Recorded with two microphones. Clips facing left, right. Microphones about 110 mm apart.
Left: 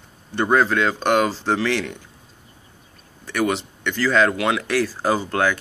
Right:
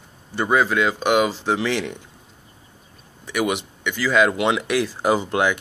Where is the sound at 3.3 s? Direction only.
15° right (ahead or behind).